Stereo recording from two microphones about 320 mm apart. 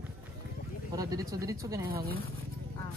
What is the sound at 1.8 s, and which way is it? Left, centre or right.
Speech, right.